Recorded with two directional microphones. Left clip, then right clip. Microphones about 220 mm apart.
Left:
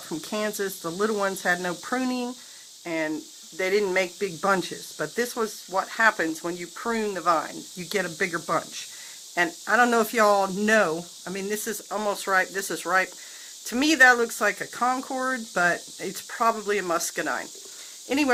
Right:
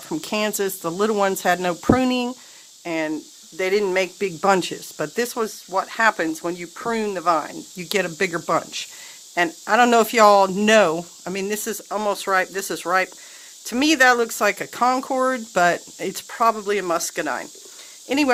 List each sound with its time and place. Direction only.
0.1 s speech: 45° right (ahead or behind)